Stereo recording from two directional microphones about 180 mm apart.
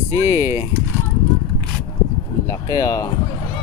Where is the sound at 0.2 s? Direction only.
15° right (ahead or behind).